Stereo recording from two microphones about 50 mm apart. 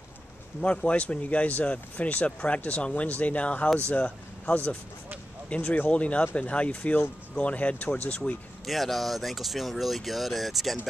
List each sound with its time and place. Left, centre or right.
0.6 s speech: left
8.6 s speech: centre